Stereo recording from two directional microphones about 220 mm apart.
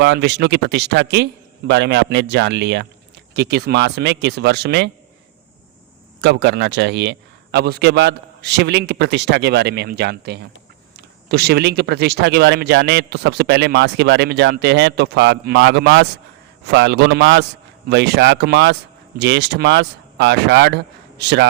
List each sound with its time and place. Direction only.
0.0 s speech: 50° right (ahead or behind)
6.2 s a man's voice: 50° right (ahead or behind)